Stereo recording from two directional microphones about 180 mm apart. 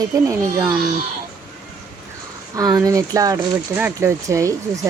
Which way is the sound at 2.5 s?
20° right (ahead or behind).